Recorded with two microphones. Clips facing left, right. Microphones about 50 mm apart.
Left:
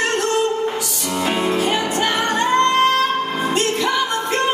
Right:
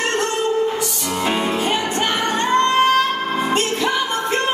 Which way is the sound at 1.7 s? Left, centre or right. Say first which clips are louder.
Left 1 dB; centre.